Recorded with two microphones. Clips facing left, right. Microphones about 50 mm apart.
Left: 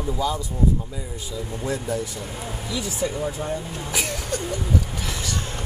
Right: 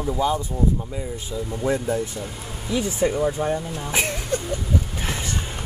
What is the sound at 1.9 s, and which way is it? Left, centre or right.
A man's voice, right.